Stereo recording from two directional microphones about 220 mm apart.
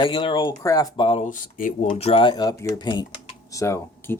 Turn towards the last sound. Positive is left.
turn(degrees=10)  # may be behind; listen again after turning